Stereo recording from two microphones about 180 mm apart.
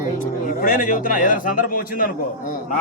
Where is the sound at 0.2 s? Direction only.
50° left (ahead or behind).